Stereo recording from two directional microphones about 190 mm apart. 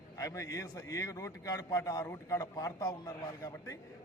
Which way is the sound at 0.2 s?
15° left (ahead or behind).